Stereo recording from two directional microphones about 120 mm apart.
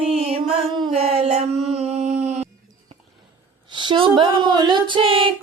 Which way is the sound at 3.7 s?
45° right (ahead or behind).